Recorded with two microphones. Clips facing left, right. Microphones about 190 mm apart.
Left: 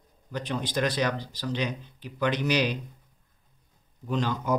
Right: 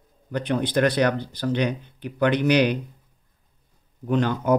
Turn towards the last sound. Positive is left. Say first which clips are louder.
# right 6 dB
turn(degrees=-60)  # may be behind; listen again after turning